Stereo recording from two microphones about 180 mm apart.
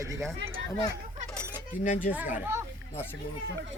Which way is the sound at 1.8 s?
50° left (ahead or behind).